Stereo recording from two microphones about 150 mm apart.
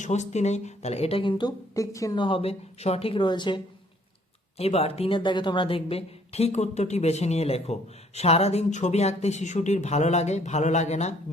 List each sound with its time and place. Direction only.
0.0 s a woman's voice: 50° left (ahead or behind); by 2.2 s 20° left (ahead or behind)
2.2 s a woman's voice: 40° left (ahead or behind)
4.5 s speech: 45° left (ahead or behind)